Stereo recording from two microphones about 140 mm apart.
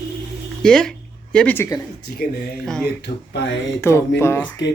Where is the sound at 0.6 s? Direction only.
5° left (ahead or behind).